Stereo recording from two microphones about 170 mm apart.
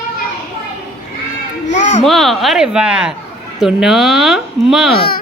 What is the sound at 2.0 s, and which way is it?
Speech, centre (ahead or behind).